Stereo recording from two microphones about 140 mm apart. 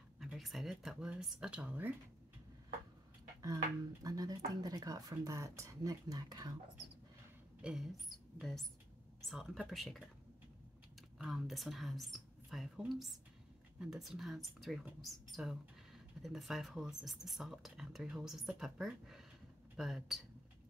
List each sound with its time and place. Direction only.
0.2 s speech: centre (ahead or behind)
4.0 s speech: 25° right (ahead or behind)
7.6 s speech: 5° right (ahead or behind)